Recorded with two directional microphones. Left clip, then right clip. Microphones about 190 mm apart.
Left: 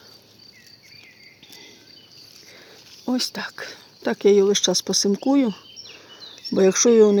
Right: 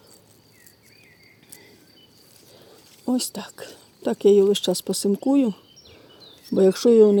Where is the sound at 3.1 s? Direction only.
20° right (ahead or behind).